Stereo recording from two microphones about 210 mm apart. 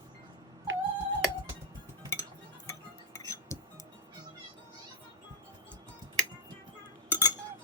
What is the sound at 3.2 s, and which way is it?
Music, 15° left (ahead or behind).